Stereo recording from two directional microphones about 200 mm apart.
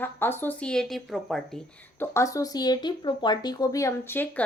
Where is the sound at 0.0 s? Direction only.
10° left (ahead or behind).